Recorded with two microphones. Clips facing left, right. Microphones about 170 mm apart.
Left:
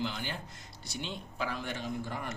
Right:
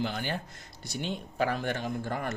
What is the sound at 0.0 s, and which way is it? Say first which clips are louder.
Speech: right 4 dB; 55° right (ahead or behind).